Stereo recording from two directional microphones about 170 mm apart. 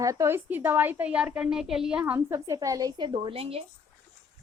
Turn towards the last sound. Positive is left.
turn(degrees=-35)  # may be behind; listen again after turning